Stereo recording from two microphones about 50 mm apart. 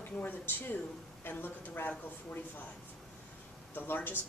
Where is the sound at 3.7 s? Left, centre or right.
Left.